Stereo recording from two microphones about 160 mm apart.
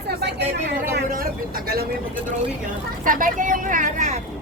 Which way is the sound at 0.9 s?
65° right (ahead or behind).